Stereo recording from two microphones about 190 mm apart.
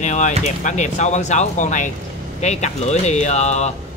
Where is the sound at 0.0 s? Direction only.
40° left (ahead or behind).